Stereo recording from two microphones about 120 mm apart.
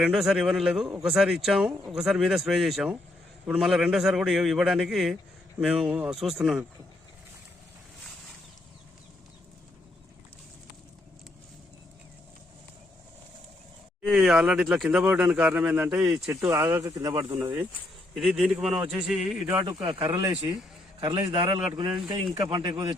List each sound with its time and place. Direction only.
0.0 s a man's voice: 5° right (ahead or behind)
14.0 s a man's voice: centre (ahead or behind)
16.5 s speech: 20° right (ahead or behind)
18.2 s speech: 5° right (ahead or behind)
19.6 s a man's voice: 45° right (ahead or behind)
20.1 s speech: 30° right (ahead or behind)
21.0 s a man's voice: 40° right (ahead or behind)